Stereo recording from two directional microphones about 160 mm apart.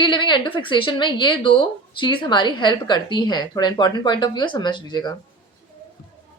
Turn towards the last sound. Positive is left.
turn(degrees=25)  # may be behind; listen again after turning